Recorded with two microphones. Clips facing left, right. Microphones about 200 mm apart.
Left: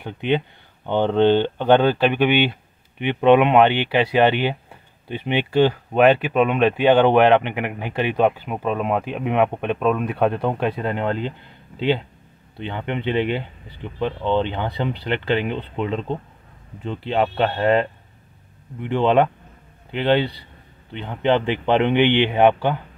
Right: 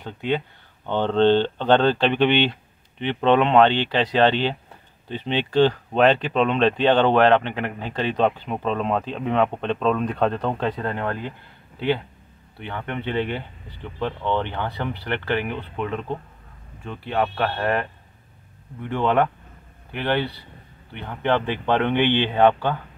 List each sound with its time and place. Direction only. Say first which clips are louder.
0.0 s speech: left 3 dB; 20° left (ahead or behind)
12.5 s speech: left 4 dB; 20° left (ahead or behind)